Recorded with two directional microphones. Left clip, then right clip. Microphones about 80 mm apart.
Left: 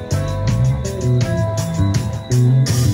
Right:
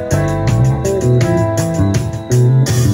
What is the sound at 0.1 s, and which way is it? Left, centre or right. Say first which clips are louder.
Music: right 5 dB; right.